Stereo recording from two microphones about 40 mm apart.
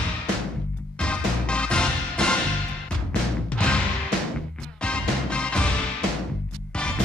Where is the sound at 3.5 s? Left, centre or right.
Left.